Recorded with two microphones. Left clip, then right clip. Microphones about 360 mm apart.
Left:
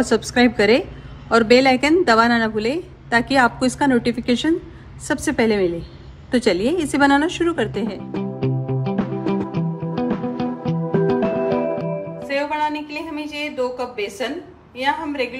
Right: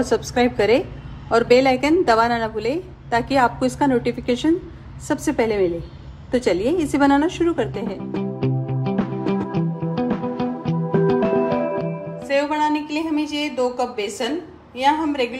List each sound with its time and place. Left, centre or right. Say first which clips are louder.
0.0 s a woman's voice: left 2 dB; centre
8.1 s music: even; centre
14.8 s a woman's voice: right 3 dB; centre